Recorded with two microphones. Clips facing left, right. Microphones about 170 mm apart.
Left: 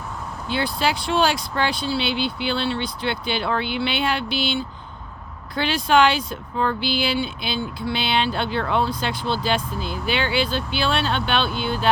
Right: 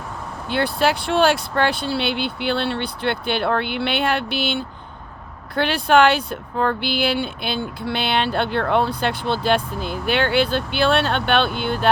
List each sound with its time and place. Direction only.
0.4 s speech: 60° right (ahead or behind)